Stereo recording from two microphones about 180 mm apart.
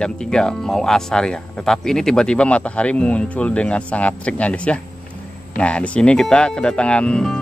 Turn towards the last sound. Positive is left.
turn(degrees=5)  # may be behind; listen again after turning